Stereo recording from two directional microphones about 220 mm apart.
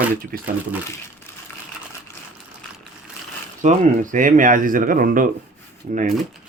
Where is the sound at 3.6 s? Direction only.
35° right (ahead or behind).